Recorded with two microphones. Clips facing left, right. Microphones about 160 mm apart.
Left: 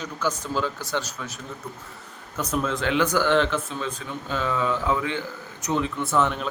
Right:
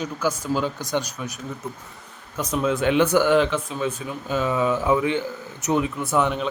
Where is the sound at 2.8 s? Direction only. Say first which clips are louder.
Right 5 dB; 20° right (ahead or behind).